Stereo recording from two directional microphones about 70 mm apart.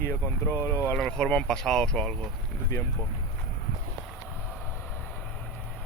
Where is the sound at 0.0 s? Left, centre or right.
Left.